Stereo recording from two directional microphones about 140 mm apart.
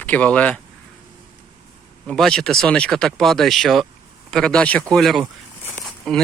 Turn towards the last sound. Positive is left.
turn(degrees=0)  # may be behind; listen again after turning